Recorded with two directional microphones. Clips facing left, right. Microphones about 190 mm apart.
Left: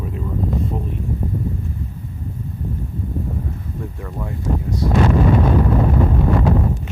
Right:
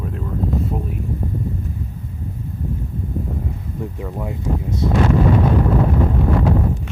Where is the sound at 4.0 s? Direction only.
15° right (ahead or behind).